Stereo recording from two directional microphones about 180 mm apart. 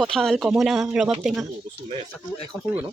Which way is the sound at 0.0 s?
5° left (ahead or behind).